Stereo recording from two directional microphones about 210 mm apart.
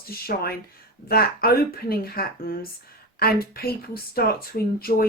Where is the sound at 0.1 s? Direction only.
45° left (ahead or behind).